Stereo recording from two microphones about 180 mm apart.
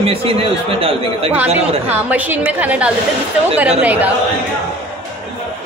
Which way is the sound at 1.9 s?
10° right (ahead or behind).